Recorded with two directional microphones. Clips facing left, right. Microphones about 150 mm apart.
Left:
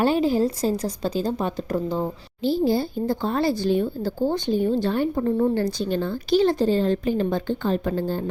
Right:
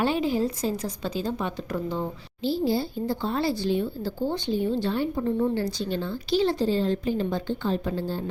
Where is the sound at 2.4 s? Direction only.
50° left (ahead or behind).